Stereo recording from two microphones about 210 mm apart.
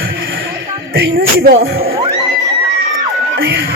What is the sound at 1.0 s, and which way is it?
Speech, 60° right (ahead or behind).